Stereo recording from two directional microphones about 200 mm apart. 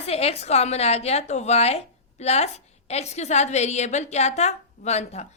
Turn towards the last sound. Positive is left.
turn(degrees=35)  # may be behind; listen again after turning